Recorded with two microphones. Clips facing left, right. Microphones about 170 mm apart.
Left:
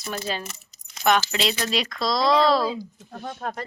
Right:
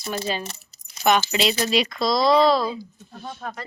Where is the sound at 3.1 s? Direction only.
55° left (ahead or behind).